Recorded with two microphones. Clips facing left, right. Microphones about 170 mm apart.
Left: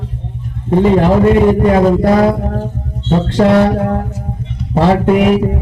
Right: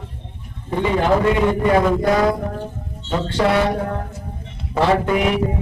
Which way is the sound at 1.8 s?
35° left (ahead or behind).